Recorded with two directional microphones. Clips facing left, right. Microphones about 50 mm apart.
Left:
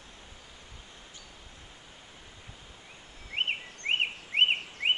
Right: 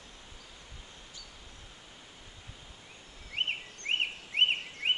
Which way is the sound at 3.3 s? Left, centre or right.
Left.